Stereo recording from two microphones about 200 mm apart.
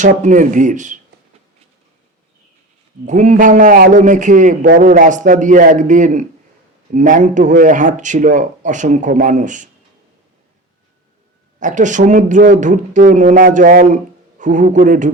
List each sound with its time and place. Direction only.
0.0 s speech: 40° right (ahead or behind)
3.1 s speech: 35° right (ahead or behind)
11.6 s speech: 40° right (ahead or behind)